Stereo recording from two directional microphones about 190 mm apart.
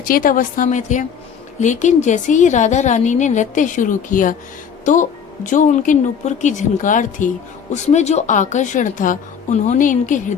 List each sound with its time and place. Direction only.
0.1 s a woman's voice: 50° left (ahead or behind)